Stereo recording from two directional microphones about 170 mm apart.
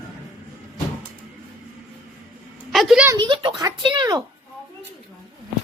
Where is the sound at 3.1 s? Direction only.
30° right (ahead or behind).